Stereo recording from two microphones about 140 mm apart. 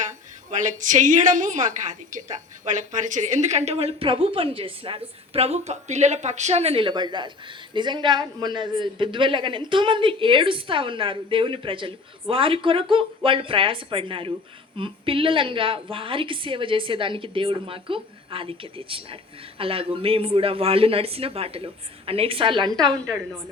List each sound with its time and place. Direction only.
0.0 s a woman's voice: 60° right (ahead or behind); by 22.7 s 35° right (ahead or behind)